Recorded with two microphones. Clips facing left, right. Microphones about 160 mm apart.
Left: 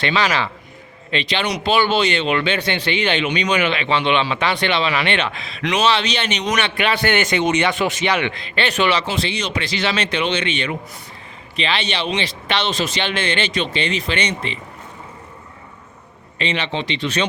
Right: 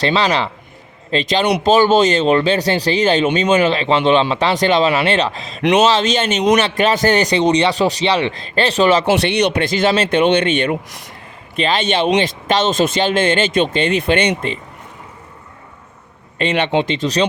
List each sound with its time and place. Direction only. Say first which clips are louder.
0.0 s a man's voice: right 4 dB; 35° right (ahead or behind)
9.0 s speech: right 9 dB; 70° right (ahead or behind); by 10.8 s 50° right (ahead or behind)
10.8 s speech: right 1 dB; 90° right
11.5 s speech: right 6 dB; 45° right (ahead or behind)
16.4 s speech: right 7 dB; 55° right (ahead or behind)